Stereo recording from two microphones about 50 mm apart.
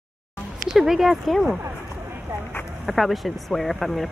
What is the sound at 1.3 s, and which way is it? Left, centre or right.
Speech, centre.